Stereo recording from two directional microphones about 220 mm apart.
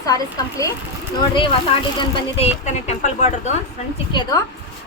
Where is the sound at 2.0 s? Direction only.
30° left (ahead or behind).